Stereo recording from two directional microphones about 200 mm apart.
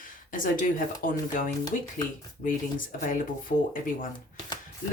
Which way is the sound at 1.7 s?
40° left (ahead or behind).